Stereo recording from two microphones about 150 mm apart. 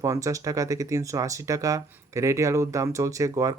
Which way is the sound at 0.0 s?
20° right (ahead or behind).